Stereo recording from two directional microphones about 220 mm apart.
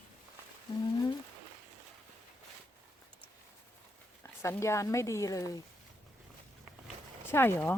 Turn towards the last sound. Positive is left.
turn(degrees=10)  # may be behind; listen again after turning